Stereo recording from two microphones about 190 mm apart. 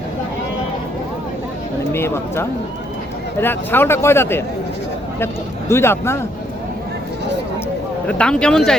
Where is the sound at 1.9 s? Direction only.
10° left (ahead or behind).